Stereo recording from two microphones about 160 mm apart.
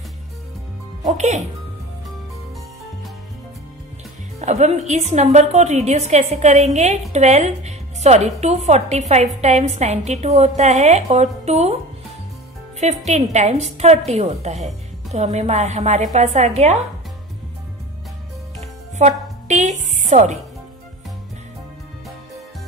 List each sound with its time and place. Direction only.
1.0 s a woman's voice: 45° right (ahead or behind)
4.4 s a woman's voice: 45° right (ahead or behind)
12.8 s a woman's voice: 45° right (ahead or behind)
18.6 s music: 45° right (ahead or behind)